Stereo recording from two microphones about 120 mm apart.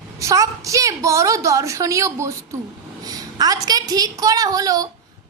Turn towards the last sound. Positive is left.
turn(degrees=-30)  # may be behind; listen again after turning